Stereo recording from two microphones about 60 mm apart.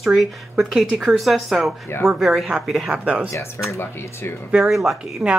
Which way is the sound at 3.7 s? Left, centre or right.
Left.